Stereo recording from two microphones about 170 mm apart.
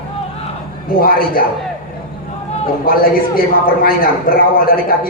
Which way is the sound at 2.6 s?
55° left (ahead or behind).